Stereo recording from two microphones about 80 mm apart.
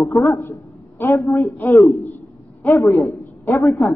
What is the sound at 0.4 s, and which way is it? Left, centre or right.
Speech, left.